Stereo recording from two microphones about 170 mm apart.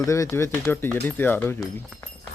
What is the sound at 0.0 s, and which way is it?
Speech, 20° left (ahead or behind).